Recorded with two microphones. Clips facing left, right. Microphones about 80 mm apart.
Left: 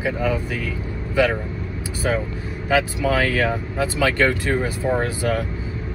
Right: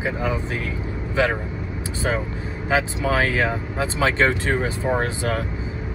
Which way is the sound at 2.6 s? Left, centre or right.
Right.